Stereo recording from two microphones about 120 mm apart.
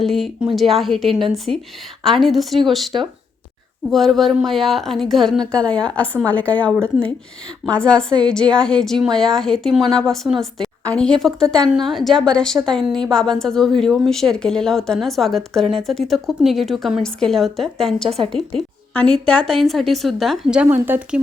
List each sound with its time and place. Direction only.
0.0 s a woman's voice: centre (ahead or behind)
20.6 s speech: 15° right (ahead or behind)